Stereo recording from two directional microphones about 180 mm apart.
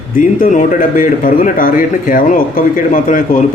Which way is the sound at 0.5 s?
50° left (ahead or behind).